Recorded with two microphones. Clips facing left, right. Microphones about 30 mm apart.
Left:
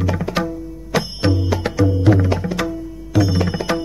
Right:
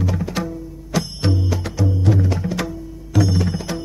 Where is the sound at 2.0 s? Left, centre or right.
Left.